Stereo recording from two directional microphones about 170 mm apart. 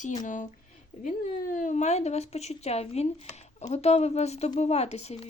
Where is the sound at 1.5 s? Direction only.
45° left (ahead or behind).